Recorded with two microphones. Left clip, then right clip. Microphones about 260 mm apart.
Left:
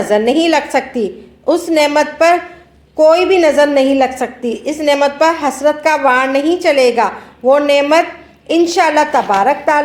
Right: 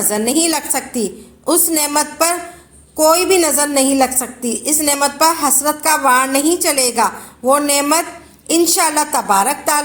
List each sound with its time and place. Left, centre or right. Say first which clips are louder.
0.1 s a woman's voice: left 6 dB; right